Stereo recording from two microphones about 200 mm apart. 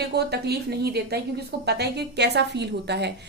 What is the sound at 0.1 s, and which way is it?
A woman's voice, 55° right (ahead or behind).